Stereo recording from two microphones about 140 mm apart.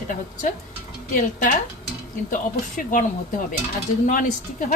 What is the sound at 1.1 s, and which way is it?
Speech, 70° left (ahead or behind).